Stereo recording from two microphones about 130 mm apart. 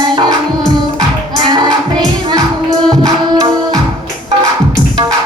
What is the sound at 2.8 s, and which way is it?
Music, 5° left (ahead or behind).